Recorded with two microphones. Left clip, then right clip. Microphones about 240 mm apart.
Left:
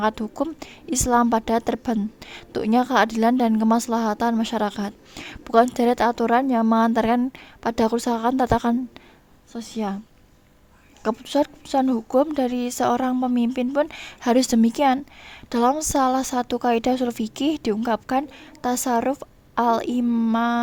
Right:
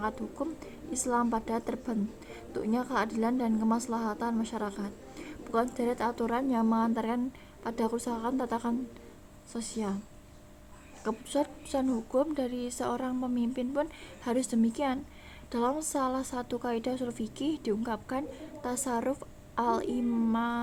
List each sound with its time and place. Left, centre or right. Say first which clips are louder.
0.0 s a woman's voice: left 11 dB; left
11.0 s a woman's voice: left 9 dB; left